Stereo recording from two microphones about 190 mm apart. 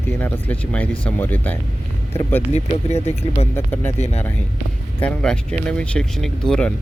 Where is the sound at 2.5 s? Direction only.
35° left (ahead or behind).